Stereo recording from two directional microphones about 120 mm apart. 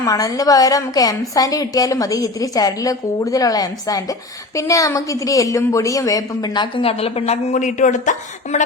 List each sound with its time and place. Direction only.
0.0 s a woman's voice: 30° left (ahead or behind)
6.8 s a woman's voice: 55° left (ahead or behind); by 8.1 s 90° left
8.5 s a woman's voice: 70° left (ahead or behind)